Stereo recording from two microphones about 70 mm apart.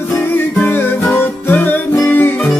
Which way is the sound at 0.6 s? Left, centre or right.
Left.